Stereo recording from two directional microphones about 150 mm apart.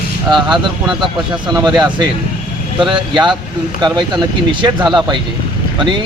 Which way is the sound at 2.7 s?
30° right (ahead or behind).